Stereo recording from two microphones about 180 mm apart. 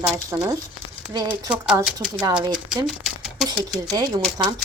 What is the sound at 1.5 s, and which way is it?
Speech, 5° right (ahead or behind).